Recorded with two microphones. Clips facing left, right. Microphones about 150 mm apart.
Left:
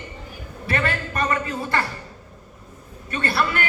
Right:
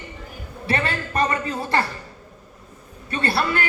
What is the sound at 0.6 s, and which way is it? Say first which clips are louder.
Speech: even; 30° right (ahead or behind).